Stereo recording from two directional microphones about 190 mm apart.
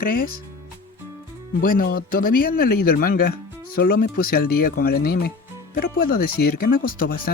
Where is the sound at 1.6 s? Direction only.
50° left (ahead or behind).